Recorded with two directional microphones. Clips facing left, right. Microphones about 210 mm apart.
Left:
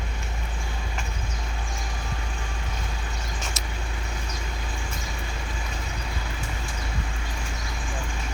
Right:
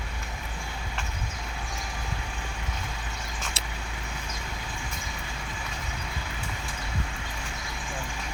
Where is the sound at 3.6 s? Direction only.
30° right (ahead or behind).